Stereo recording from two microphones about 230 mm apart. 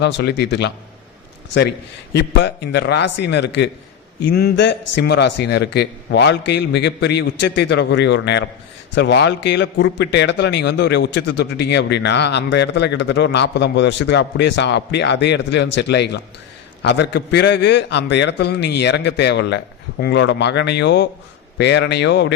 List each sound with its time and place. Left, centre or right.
0.0 s a man's voice: left
2.1 s a man's voice: left